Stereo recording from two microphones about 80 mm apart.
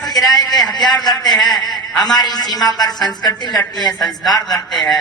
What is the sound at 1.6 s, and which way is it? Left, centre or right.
Speech, centre.